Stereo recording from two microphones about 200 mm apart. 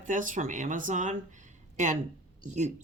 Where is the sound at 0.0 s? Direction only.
40° right (ahead or behind).